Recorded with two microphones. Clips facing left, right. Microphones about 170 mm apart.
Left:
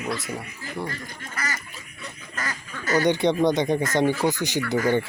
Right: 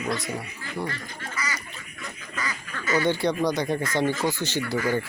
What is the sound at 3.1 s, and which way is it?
Speech, 20° left (ahead or behind).